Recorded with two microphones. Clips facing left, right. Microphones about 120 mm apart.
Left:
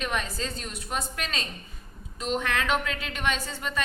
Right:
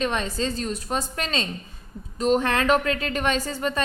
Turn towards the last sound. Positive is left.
turn(degrees=-35)  # may be behind; listen again after turning